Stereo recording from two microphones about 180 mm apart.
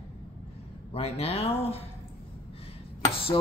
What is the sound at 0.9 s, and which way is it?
Speech, 35° left (ahead or behind).